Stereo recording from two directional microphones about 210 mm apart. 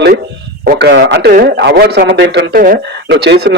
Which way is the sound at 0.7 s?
55° right (ahead or behind).